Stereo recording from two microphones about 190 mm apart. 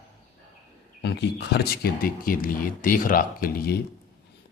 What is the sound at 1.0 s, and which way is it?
A man's voice, 60° left (ahead or behind).